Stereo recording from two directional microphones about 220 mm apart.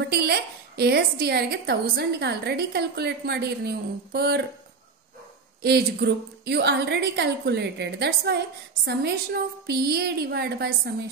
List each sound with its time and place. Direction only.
0.1 s a woman's voice: 45° right (ahead or behind)
5.6 s a woman's voice: 45° right (ahead or behind)